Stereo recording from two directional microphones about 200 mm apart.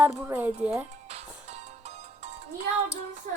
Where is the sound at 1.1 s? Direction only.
30° right (ahead or behind).